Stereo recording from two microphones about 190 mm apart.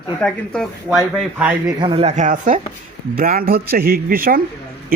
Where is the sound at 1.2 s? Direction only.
5° right (ahead or behind).